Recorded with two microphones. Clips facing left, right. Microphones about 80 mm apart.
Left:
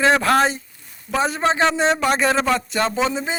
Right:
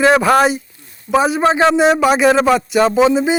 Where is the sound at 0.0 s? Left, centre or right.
Centre.